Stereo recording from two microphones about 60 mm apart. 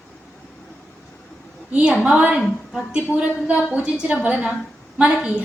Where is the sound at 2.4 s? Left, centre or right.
Centre.